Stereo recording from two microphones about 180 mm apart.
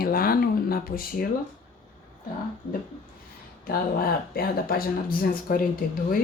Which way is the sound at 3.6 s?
55° left (ahead or behind).